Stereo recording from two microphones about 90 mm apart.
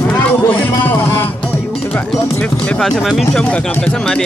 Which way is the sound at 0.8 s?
20° left (ahead or behind).